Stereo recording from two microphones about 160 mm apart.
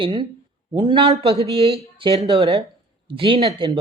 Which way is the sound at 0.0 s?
30° right (ahead or behind).